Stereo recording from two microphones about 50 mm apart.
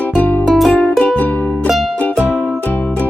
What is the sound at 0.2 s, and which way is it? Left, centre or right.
Music, left.